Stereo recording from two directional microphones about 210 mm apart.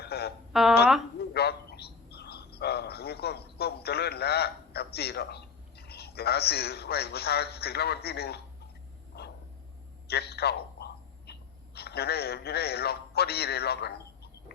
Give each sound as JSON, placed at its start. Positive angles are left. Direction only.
{"t": 0.0, "sound": "a sound", "side_deg": 50}
{"t": 0.5, "sound": "speech", "side_deg": 0}
{"t": 1.2, "sound": "frog", "side_deg": 50}
{"t": 10.1, "sound": "a man's voice", "side_deg": 50}